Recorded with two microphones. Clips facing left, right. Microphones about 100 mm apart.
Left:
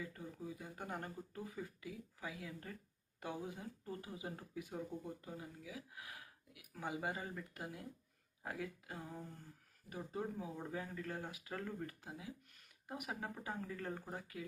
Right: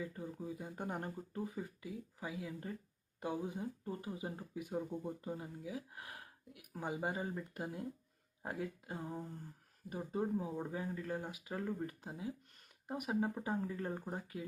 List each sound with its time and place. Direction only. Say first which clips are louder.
0.0 s speech: right 4 dB; 25° right (ahead or behind)
6.7 s speech: right 3 dB; 25° right (ahead or behind)